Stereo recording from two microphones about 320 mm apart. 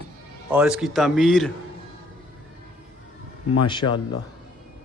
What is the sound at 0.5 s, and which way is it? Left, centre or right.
Speech, centre.